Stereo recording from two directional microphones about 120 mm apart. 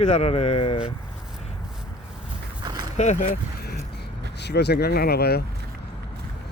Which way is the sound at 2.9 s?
75° left (ahead or behind).